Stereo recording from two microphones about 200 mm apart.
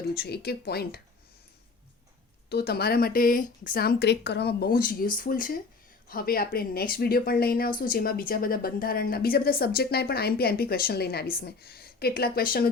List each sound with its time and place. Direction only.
0.1 s speech: 50° left (ahead or behind)
2.5 s speech: 55° left (ahead or behind)